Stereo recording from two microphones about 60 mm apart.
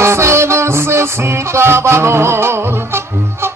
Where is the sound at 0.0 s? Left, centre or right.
Right.